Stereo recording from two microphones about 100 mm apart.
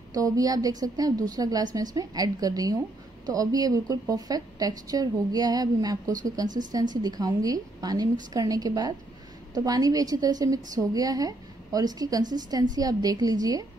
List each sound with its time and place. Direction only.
0.1 s a woman's voice: 40° right (ahead or behind)